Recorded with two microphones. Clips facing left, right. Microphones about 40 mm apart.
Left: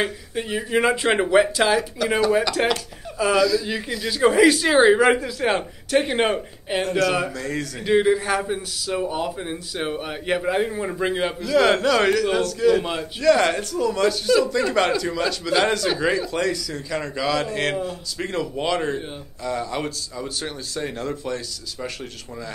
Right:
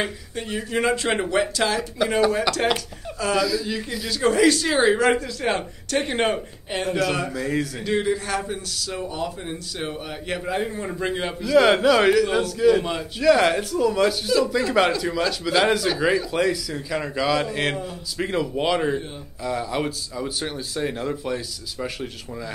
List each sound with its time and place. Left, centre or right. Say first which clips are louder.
0.0 s a man's voice: left 3 dB; centre
2.0 s a man's voice: even; centre
2.6 s a man's voice: left 1 dB; centre
3.3 s a man's voice: left 3 dB; centre
4.1 s a man's voice: left 2 dB; centre
7.8 s a man's voice: left 9 dB; centre
11.4 s a man's voice: right 2 dB; centre